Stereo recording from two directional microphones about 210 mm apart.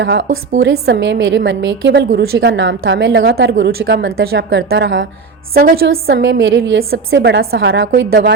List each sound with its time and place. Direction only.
0.0 s a woman's voice: 55° right (ahead or behind)
5.5 s a woman's voice: 45° right (ahead or behind)